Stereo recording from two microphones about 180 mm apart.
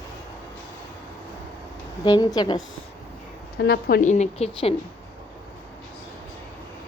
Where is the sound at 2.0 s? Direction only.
20° left (ahead or behind).